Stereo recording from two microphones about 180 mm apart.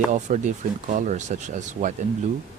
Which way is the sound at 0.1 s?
45° right (ahead or behind).